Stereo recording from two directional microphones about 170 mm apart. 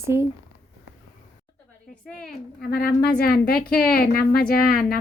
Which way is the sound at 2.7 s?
65° left (ahead or behind).